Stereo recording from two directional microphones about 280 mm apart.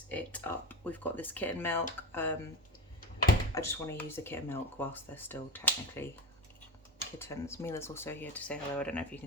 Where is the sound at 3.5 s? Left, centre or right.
Centre.